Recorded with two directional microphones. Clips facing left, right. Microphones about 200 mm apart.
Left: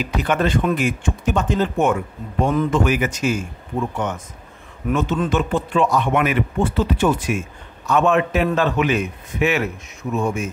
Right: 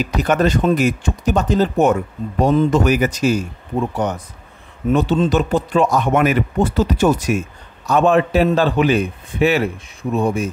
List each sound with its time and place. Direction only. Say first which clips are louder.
0.0 s a man's voice: right 4 dB; 40° right (ahead or behind)